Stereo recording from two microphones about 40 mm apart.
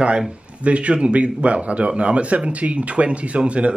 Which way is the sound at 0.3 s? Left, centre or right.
Right.